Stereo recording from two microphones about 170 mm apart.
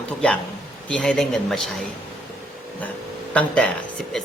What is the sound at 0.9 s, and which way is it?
Speech, 5° left (ahead or behind).